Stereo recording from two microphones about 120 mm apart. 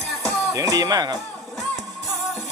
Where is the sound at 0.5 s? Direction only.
30° right (ahead or behind).